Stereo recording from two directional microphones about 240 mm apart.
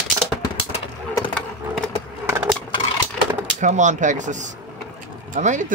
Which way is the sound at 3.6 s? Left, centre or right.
Right.